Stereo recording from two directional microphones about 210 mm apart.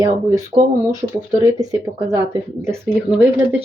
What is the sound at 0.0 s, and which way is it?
Speech, 15° right (ahead or behind).